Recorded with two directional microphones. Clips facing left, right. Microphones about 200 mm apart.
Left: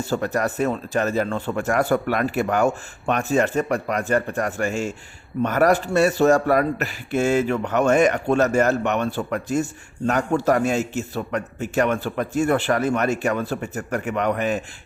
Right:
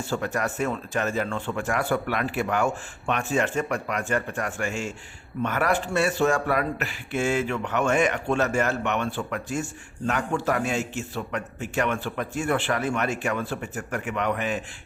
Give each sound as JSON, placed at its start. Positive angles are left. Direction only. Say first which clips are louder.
{"t": 0.0, "sound": "speech", "louder": "left 4 dB", "side_deg": 40}